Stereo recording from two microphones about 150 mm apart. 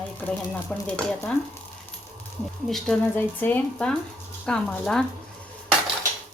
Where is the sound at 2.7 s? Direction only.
5° left (ahead or behind).